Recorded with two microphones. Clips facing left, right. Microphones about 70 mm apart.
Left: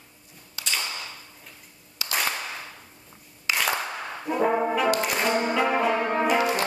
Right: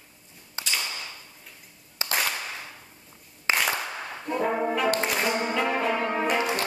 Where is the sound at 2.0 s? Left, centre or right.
Right.